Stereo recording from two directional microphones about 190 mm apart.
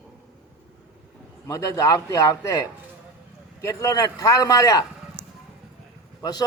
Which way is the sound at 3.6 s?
20° left (ahead or behind).